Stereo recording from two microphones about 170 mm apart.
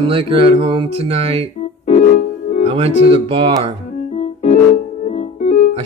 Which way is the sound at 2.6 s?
35° right (ahead or behind).